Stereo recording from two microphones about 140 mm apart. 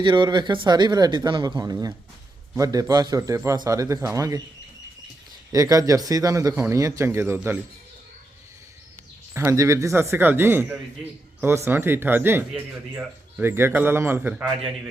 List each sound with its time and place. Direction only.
0.0 s a man's voice: 35° right (ahead or behind)
5.5 s a man's voice: 25° right (ahead or behind)
9.3 s speech: 20° right (ahead or behind)